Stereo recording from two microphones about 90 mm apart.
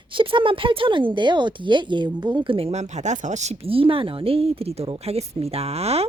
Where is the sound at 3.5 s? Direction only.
90° right.